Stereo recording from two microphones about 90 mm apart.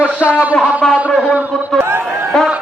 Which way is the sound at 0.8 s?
5° left (ahead or behind).